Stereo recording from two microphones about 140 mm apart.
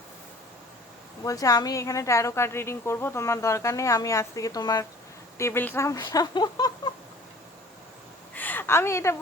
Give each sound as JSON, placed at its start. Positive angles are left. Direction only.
{"t": 1.2, "sound": "a woman's voice", "side_deg": 25}
{"t": 6.0, "sound": "speech", "side_deg": 30}
{"t": 8.4, "sound": "a sound", "side_deg": 15}